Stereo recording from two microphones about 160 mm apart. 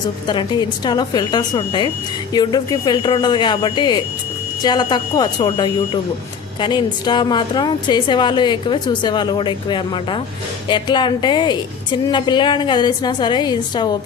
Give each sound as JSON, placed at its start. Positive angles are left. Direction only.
{"t": 0.3, "sound": "a woman's voice", "side_deg": 25}